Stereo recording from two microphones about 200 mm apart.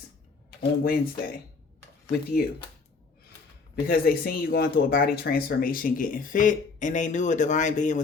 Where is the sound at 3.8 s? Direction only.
45° left (ahead or behind).